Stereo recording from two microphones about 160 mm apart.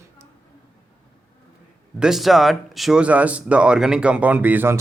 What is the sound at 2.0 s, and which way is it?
A man's voice, centre (ahead or behind).